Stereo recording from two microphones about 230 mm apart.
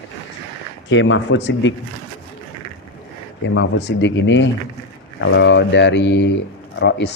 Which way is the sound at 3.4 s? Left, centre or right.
Left.